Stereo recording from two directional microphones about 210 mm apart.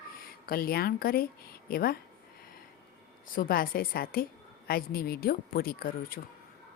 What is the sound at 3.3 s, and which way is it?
A woman's voice, 45° left (ahead or behind).